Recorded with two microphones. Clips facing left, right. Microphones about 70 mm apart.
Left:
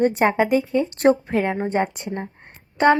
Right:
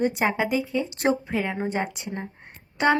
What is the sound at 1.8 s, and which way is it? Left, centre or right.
Speech, left.